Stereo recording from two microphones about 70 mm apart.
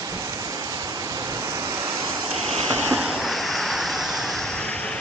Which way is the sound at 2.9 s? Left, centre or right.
Centre.